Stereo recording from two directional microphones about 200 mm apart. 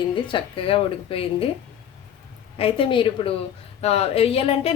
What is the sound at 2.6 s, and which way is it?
A woman's voice, 30° left (ahead or behind).